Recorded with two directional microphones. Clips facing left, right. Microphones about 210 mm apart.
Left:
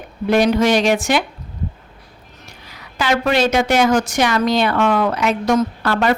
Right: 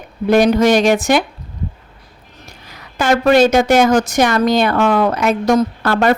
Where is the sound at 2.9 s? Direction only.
50° right (ahead or behind).